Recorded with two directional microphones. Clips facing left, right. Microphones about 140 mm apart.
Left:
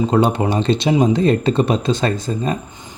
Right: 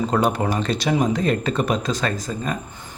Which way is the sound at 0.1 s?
25° left (ahead or behind).